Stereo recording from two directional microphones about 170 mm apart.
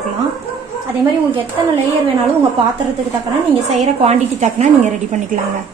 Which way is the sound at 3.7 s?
40° right (ahead or behind).